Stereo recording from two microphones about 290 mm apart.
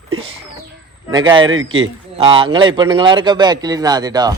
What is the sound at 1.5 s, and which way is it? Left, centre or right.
Speech, right.